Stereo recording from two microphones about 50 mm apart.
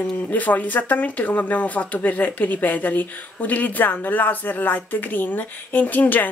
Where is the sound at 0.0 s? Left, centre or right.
Left.